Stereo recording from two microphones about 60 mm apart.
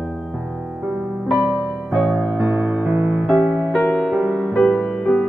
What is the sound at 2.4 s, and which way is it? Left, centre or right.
Music, right.